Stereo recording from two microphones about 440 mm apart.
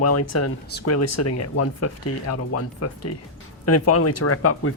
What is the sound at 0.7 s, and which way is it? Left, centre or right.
Speech, left.